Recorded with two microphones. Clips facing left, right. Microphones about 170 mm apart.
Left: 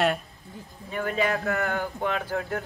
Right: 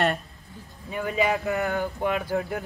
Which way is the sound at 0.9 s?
10° right (ahead or behind).